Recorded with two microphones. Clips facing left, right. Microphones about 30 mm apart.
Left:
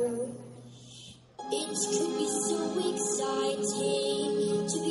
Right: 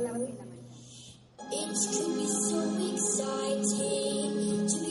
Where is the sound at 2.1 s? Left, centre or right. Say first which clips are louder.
Left 1 dB; centre.